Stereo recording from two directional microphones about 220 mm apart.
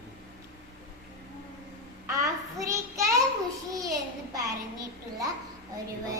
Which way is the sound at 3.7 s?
15° right (ahead or behind).